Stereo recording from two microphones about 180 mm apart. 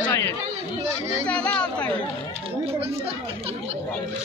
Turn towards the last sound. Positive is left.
turn(degrees=-35)  # may be behind; listen again after turning